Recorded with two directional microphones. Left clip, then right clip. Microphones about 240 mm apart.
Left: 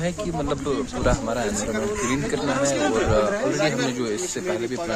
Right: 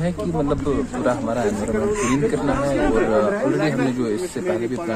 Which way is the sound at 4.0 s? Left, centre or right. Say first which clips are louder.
Right 3 dB; centre.